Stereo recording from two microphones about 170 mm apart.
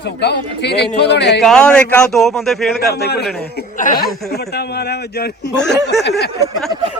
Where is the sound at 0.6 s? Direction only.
90° left.